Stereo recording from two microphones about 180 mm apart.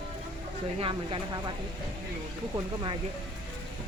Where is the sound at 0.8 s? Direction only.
30° right (ahead or behind).